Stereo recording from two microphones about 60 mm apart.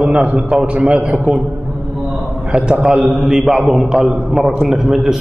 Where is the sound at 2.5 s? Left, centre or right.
Centre.